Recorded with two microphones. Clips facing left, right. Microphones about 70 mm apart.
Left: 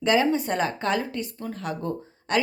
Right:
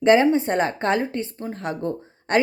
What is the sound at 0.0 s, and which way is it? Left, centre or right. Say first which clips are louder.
A woman's voice: right 6 dB; right.